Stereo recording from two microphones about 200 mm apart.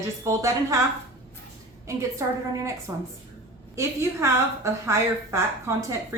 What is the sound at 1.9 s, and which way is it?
Speech, 15° right (ahead or behind).